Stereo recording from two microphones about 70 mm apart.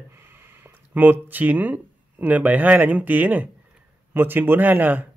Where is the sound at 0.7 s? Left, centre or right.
Right.